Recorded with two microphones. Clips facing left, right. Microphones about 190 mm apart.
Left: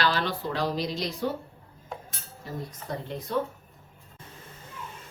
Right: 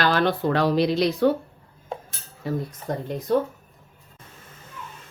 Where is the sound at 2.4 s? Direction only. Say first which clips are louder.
Right 10 dB; 70° right (ahead or behind).